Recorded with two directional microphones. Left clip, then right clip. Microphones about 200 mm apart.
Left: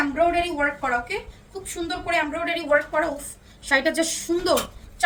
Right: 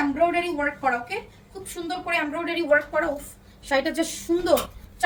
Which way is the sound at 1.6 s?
20° left (ahead or behind).